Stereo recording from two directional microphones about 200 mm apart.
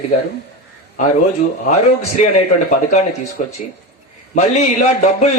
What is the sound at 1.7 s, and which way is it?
A man's voice, 35° left (ahead or behind).